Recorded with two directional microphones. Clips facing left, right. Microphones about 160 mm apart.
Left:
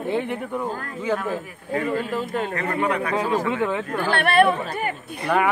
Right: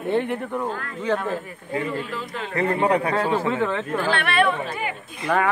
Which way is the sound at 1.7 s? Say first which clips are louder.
Left 3 dB; 45° left (ahead or behind).